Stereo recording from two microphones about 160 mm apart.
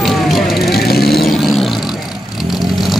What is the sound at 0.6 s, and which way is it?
Vehicle, 80° left.